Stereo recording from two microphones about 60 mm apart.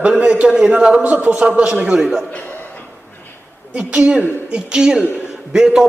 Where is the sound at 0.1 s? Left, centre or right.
Centre.